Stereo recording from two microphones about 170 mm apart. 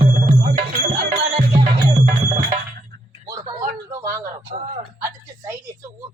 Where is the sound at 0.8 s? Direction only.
55° right (ahead or behind).